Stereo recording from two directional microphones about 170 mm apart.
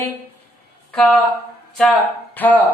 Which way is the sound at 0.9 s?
5° left (ahead or behind).